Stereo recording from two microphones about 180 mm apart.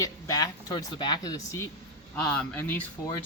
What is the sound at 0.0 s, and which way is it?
Speech, 20° left (ahead or behind).